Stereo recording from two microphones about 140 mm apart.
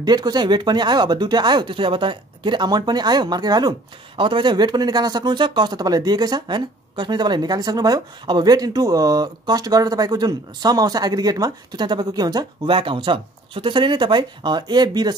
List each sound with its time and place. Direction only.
0.0 s speech: 30° right (ahead or behind)